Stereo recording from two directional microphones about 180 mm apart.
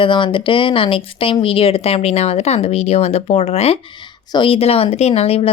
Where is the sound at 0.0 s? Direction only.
30° left (ahead or behind).